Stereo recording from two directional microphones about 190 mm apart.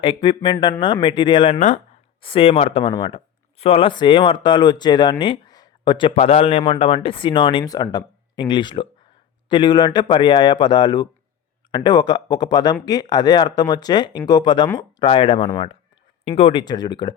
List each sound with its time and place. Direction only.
0.0 s speech: 25° left (ahead or behind)